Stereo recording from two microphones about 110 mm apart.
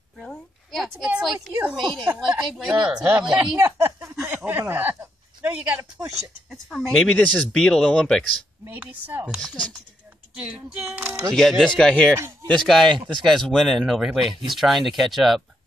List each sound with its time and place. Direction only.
0.2 s a sound: centre (ahead or behind)
2.1 s speech: 5° right (ahead or behind)
3.5 s a sound: 20° right (ahead or behind)
4.5 s speech: 15° right (ahead or behind)
5.8 s speech: 30° right (ahead or behind)
6.5 s speech: 5° left (ahead or behind)
8.6 s speech: 15° right (ahead or behind)
10.9 s speech: 20° right (ahead or behind)
11.3 s speech: 5° left (ahead or behind)